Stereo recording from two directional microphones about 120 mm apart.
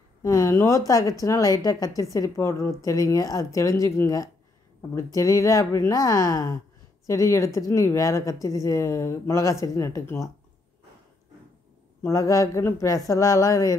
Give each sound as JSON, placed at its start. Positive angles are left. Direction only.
{"t": 0.2, "sound": "a woman's voice", "side_deg": 25}
{"t": 12.0, "sound": "a woman's voice", "side_deg": 25}